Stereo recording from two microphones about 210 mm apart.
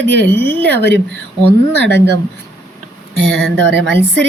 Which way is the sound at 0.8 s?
55° right (ahead or behind).